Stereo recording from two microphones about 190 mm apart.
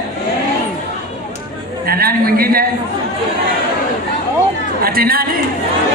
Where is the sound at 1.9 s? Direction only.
50° right (ahead or behind).